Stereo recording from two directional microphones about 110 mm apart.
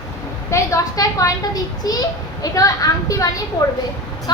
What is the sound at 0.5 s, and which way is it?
Speech, 30° left (ahead or behind).